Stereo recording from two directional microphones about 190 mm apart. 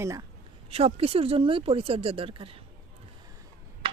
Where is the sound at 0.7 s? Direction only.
30° right (ahead or behind).